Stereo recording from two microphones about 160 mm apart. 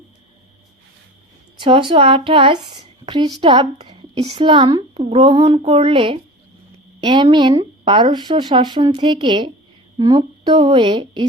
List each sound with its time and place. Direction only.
1.5 s a woman's voice: 30° right (ahead or behind)